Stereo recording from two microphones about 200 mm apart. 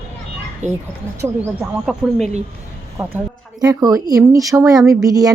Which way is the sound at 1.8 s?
Centre (ahead or behind).